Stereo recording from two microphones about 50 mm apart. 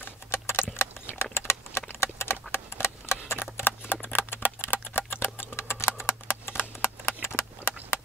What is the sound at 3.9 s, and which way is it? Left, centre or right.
Typing, left.